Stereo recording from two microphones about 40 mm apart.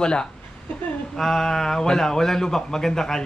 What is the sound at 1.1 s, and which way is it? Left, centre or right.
Speech, centre.